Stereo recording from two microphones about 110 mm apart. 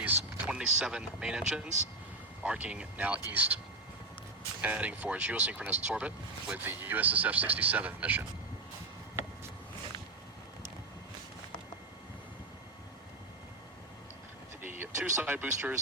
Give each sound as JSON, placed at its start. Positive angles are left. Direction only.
{"t": 0.0, "sound": "speech", "side_deg": -15}
{"t": 4.6, "sound": "speech", "side_deg": -15}
{"t": 14.6, "sound": "a sound", "side_deg": -20}